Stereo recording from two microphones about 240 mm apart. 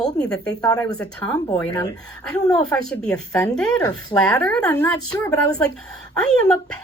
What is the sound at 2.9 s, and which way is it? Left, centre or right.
Speech, centre.